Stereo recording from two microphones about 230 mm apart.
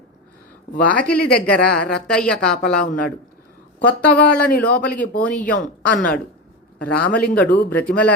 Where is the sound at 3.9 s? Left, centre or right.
Centre.